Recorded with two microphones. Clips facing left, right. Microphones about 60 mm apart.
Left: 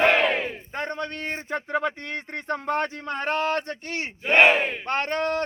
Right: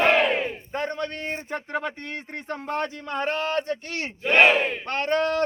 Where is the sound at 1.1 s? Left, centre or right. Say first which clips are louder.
Left 1 dB; left.